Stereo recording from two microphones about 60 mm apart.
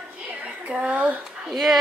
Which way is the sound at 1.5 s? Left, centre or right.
Centre.